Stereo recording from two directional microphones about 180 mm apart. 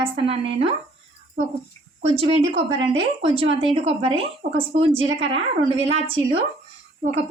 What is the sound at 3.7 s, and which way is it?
A woman's voice, 35° right (ahead or behind).